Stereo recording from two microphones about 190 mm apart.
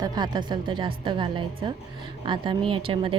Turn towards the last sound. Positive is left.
turn(degrees=-30)  # may be behind; listen again after turning